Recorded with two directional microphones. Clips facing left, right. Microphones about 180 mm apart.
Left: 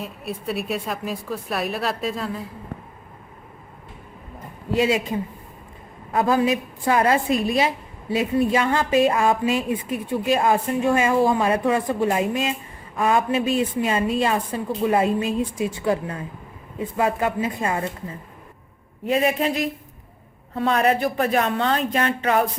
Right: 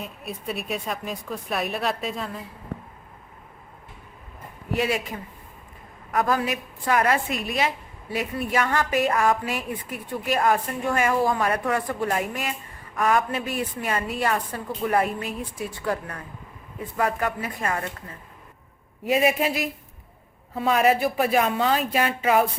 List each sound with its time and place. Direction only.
0.0 s a woman's voice: centre (ahead or behind)
4.8 s a woman's voice: 25° left (ahead or behind)
19.0 s a woman's voice: 10° right (ahead or behind)